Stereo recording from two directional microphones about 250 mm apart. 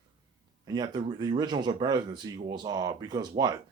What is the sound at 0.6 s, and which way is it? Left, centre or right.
Speech, centre.